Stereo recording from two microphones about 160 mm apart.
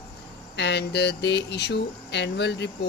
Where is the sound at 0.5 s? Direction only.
90° left.